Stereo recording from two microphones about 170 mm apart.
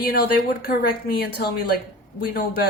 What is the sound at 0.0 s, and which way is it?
Speech, 60° left (ahead or behind).